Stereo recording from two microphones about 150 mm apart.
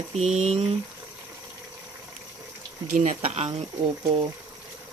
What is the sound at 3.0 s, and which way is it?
Speech, 50° right (ahead or behind).